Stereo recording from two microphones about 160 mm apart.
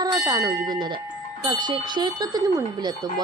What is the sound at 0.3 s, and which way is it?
A woman's voice, 25° right (ahead or behind).